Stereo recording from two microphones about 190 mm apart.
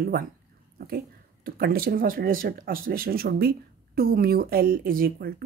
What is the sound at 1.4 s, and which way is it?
Speech, 50° right (ahead or behind).